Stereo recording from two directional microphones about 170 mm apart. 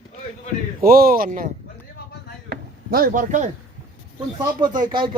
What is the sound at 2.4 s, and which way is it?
Chop, 60° right (ahead or behind).